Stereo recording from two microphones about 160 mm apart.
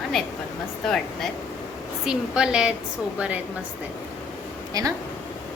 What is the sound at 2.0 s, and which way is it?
Speech, 5° right (ahead or behind).